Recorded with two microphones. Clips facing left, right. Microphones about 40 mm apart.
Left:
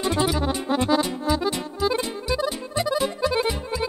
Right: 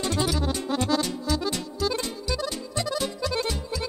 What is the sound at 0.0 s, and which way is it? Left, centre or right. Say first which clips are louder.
Music: left 4 dB; centre.